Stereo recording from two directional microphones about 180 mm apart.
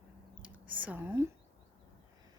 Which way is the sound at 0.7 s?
10° right (ahead or behind).